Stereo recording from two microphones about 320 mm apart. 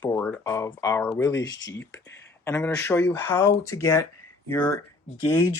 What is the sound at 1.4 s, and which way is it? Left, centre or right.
Speech, left.